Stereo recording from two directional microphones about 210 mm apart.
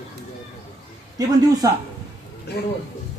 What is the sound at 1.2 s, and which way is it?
Speech, 15° right (ahead or behind).